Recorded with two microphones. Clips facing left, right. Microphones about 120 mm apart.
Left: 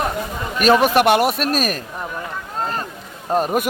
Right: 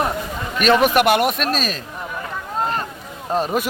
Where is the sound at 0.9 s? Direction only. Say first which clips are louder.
Left 1 dB; 35° left (ahead or behind).